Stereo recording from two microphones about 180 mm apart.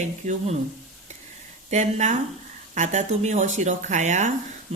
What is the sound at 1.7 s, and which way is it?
Speech, 40° right (ahead or behind).